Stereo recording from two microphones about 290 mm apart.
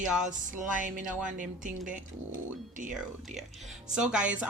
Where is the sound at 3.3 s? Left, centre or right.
Centre.